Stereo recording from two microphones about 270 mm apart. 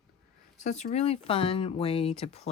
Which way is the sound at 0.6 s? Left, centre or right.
Left.